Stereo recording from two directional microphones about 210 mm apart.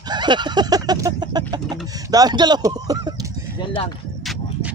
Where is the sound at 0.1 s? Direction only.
20° right (ahead or behind).